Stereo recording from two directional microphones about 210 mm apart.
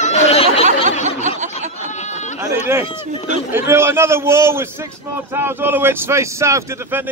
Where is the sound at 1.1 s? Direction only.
35° right (ahead or behind).